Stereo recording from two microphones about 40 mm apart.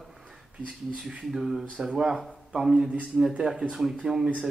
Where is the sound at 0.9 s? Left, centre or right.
Centre.